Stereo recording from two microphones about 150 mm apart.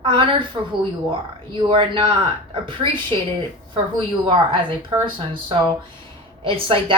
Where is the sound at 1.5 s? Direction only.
35° right (ahead or behind).